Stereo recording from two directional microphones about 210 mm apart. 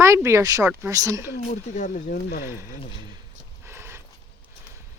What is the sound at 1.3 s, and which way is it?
Speech, 35° left (ahead or behind).